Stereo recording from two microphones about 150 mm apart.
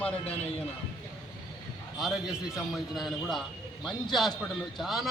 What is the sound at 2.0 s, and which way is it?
Speech, centre (ahead or behind).